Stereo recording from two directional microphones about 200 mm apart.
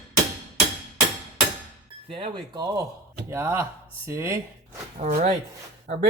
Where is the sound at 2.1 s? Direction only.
25° right (ahead or behind).